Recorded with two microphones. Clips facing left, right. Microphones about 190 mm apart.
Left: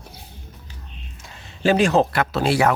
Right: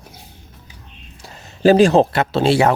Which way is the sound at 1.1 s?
35° right (ahead or behind).